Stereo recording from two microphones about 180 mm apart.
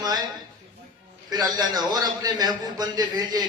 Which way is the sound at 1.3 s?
20° right (ahead or behind).